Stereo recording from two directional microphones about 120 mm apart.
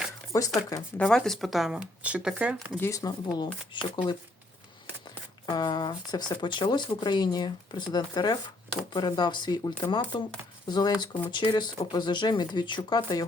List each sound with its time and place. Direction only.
0.3 s speech: 30° left (ahead or behind)
0.9 s speech: 5° left (ahead or behind); by 2.7 s 10° right (ahead or behind)
2.8 s speech: 30° left (ahead or behind)
5.5 s speech: 35° left (ahead or behind)